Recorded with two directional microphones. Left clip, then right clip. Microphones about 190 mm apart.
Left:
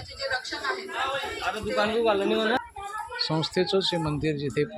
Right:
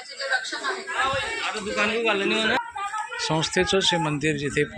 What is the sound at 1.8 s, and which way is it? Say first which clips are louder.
Speech: right 1 dB; 35° left (ahead or behind).